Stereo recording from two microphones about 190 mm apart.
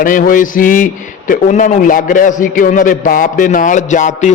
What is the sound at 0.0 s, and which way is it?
A man's voice, 45° left (ahead or behind).